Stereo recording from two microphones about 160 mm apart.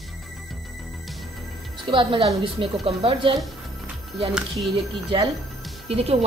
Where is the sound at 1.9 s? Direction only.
30° right (ahead or behind).